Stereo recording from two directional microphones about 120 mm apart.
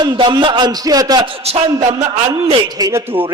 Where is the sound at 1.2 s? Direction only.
55° right (ahead or behind).